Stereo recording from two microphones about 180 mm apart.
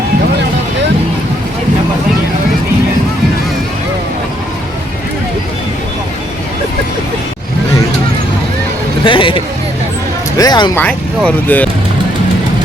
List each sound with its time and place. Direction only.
9.0 s a man's voice: 30° left (ahead or behind)
10.8 s speech: 5° left (ahead or behind)